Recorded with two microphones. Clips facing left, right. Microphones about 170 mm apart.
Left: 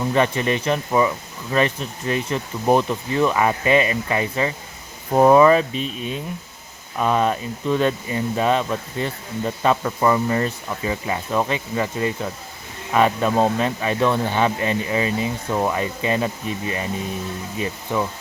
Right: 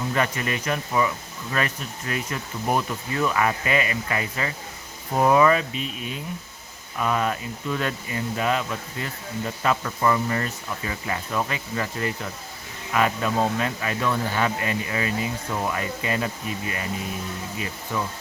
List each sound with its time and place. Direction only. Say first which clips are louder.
0.1 s speech: left 7 dB; 25° left (ahead or behind)
5.1 s speech: left 6 dB; 40° left (ahead or behind)
17.9 s speech: left 5 dB; 20° left (ahead or behind)